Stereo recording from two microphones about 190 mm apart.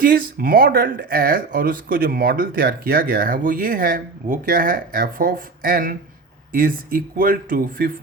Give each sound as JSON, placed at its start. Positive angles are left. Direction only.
{"t": 0.0, "sound": "speech", "side_deg": -50}